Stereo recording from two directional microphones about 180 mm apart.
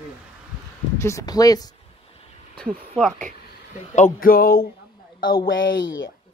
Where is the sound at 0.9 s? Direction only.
15° left (ahead or behind).